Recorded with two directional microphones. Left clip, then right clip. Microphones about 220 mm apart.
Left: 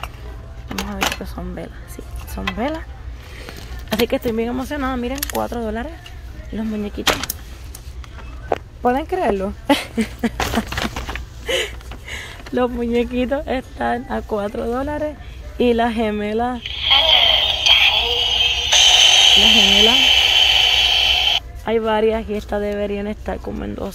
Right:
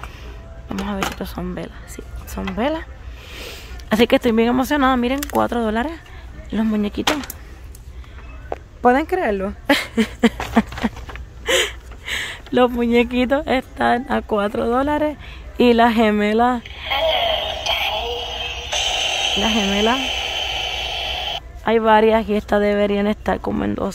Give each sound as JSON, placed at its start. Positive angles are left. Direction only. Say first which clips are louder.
{"t": 1.3, "sound": "speech", "louder": "right 2 dB", "side_deg": -30}
{"t": 3.3, "sound": "speech", "louder": "right 2 dB", "side_deg": -50}
{"t": 9.2, "sound": "speech", "louder": "left 1 dB", "side_deg": -15}
{"t": 9.9, "sound": "speech", "louder": "right 5 dB", "side_deg": -40}
{"t": 11.4, "sound": "speech", "louder": "right 3 dB", "side_deg": -40}
{"t": 16.9, "sound": "synthetic singing", "louder": "left 5 dB", "side_deg": -10}
{"t": 21.6, "sound": "speech", "louder": "right 4 dB", "side_deg": -30}